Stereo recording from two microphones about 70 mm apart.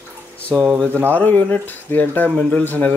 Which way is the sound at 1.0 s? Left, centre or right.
Left.